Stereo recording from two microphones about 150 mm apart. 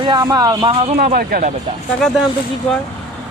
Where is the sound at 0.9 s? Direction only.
75° right (ahead or behind).